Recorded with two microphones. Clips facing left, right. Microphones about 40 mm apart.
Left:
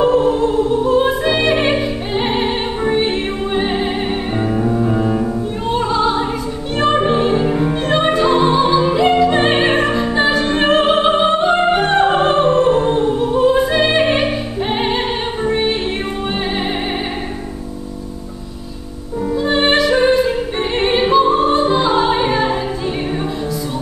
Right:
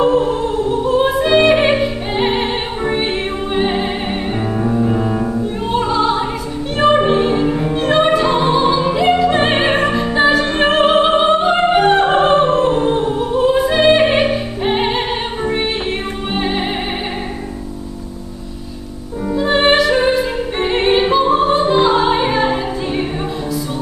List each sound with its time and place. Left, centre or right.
0.0 s music: centre
6.8 s opera: centre
15.4 s music: centre
19.4 s music: centre